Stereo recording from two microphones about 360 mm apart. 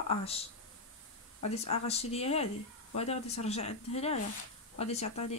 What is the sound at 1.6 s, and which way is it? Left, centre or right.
Speech, centre.